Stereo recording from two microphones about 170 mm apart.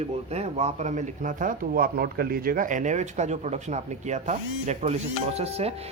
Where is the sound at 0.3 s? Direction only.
40° right (ahead or behind).